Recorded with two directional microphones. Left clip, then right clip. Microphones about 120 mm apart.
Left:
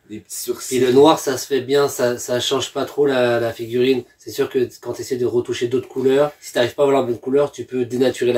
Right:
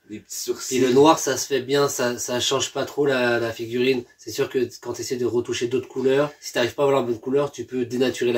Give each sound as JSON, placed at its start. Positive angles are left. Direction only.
{"t": 0.7, "sound": "speech", "side_deg": -25}